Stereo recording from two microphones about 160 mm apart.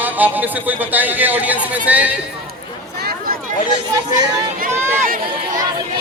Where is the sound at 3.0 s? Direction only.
70° right (ahead or behind).